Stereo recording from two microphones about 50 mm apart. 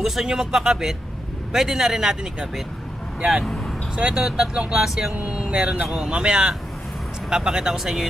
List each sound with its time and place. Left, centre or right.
0.0 s speech: centre
3.4 s speech: centre
3.9 s speech: centre
5.1 s speech: right; by 8.1 s centre